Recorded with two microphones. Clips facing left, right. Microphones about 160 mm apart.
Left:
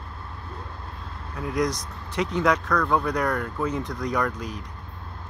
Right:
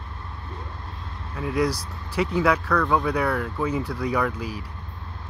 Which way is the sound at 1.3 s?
5° right (ahead or behind).